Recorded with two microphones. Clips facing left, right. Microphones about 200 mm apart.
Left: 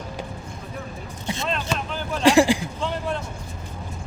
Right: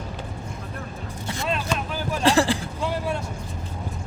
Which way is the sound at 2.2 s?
15° left (ahead or behind).